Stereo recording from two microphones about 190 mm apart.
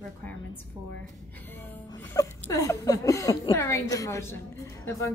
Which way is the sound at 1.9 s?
20° left (ahead or behind).